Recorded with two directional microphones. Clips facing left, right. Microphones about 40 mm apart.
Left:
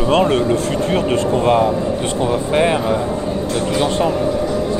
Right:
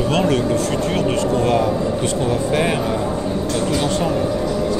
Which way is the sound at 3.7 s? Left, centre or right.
Left.